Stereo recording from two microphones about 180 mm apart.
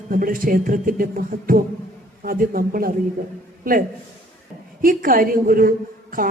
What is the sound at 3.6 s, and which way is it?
Speech, 50° right (ahead or behind).